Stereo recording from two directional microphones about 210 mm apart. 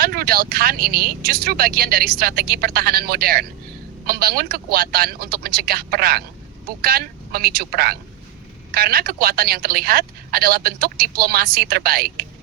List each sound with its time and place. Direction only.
0.0 s a woman's voice: 45° right (ahead or behind)